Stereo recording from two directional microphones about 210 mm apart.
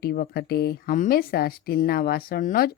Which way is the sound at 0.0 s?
45° left (ahead or behind).